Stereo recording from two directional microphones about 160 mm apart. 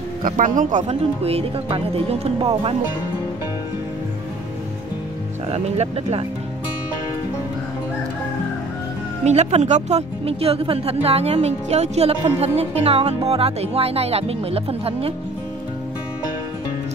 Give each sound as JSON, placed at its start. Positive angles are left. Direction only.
{"t": 0.2, "sound": "speech", "side_deg": -55}
{"t": 5.5, "sound": "speech", "side_deg": -40}
{"t": 9.2, "sound": "speech", "side_deg": -45}